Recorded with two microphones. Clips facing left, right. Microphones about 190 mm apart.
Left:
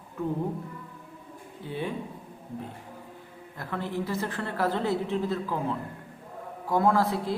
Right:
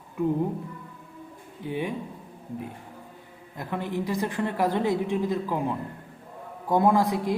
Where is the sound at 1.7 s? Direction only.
15° right (ahead or behind).